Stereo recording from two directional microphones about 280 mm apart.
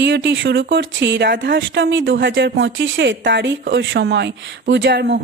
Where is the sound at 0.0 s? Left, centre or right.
Right.